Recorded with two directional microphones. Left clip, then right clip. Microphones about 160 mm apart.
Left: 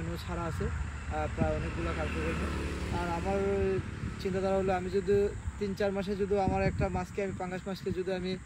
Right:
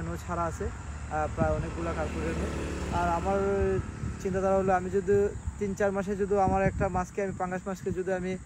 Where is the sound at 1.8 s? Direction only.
75° right (ahead or behind).